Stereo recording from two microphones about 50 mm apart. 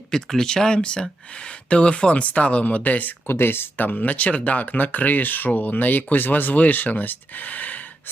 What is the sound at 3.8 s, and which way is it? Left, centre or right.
Speech, left.